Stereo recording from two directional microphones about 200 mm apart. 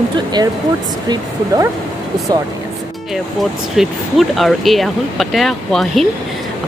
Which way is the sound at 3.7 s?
Centre (ahead or behind).